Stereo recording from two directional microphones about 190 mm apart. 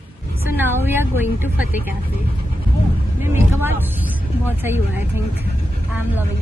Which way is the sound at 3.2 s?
10° right (ahead or behind).